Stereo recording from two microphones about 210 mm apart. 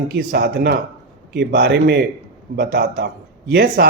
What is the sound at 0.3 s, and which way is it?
Speech, 50° right (ahead or behind).